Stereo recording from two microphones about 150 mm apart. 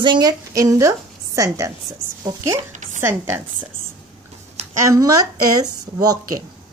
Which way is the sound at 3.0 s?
15° right (ahead or behind).